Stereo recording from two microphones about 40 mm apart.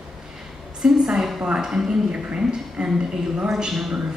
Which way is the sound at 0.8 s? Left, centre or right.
Centre.